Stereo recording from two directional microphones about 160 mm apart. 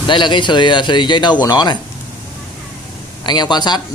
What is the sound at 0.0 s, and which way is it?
Speech, 30° left (ahead or behind).